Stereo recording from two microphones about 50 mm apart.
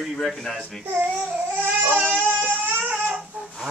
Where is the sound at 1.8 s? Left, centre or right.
Right.